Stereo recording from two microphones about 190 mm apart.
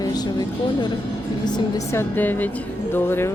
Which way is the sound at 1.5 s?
20° left (ahead or behind).